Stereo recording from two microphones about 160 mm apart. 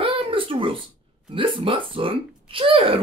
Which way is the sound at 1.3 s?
35° right (ahead or behind).